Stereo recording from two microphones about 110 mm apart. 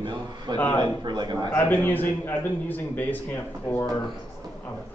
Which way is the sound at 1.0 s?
40° right (ahead or behind).